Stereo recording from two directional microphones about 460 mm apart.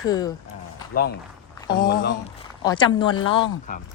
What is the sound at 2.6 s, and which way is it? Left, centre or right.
Speech, centre.